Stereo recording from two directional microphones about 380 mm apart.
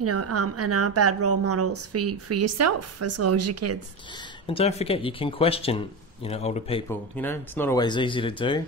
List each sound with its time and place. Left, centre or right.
0.0 s a woman's voice: right
4.5 s speech: centre